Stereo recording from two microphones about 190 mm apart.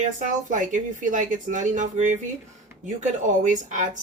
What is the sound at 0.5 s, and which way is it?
Speech, 40° right (ahead or behind).